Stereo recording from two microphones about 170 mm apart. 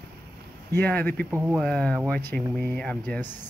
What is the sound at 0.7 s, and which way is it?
Speech, 10° left (ahead or behind).